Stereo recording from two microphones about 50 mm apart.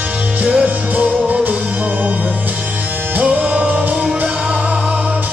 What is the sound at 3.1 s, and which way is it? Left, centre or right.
Music, right.